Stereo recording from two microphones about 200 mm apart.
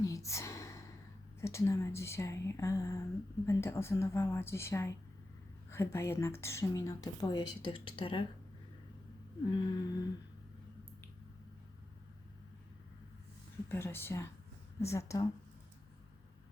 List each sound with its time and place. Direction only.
0.0 s a sound: 15° left (ahead or behind)
1.4 s speech: 15° left (ahead or behind)
9.5 s humming: 20° left (ahead or behind)
13.7 s speech: 10° left (ahead or behind)